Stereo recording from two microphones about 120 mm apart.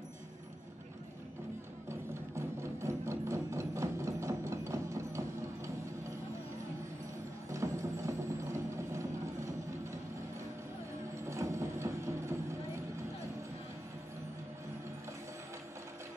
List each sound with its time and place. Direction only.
1.9 s music: 25° right (ahead or behind)
7.4 s music: 25° right (ahead or behind)
11.2 s mechanisms: 25° right (ahead or behind)